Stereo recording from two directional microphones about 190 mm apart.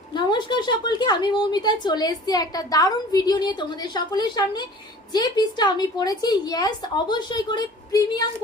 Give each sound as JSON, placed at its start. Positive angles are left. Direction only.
{"t": 0.1, "sound": "a woman's voice", "side_deg": 25}